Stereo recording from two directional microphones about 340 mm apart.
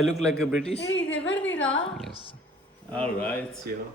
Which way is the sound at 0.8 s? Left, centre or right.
Left.